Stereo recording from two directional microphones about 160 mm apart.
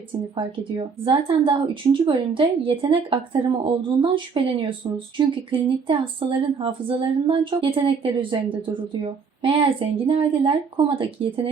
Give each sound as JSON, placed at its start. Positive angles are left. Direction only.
{"t": 0.3, "sound": "a woman's voice", "side_deg": -30}